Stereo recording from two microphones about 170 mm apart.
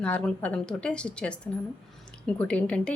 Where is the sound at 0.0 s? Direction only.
5° left (ahead or behind).